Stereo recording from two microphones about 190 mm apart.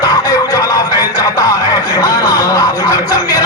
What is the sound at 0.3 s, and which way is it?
Music, 20° left (ahead or behind).